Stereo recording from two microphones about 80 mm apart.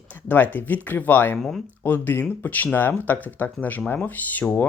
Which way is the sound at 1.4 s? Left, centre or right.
Centre.